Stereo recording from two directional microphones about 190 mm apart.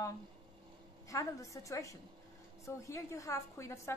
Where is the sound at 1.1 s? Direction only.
15° left (ahead or behind).